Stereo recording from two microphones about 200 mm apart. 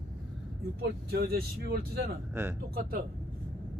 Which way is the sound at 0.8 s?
50° right (ahead or behind).